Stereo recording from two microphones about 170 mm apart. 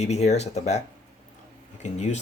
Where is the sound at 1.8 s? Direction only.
40° left (ahead or behind).